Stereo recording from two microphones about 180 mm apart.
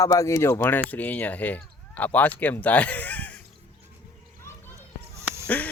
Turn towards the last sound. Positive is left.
turn(degrees=-15)  # may be behind; listen again after turning